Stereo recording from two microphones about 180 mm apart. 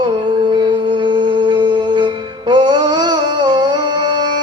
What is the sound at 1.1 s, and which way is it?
Music, 25° right (ahead or behind).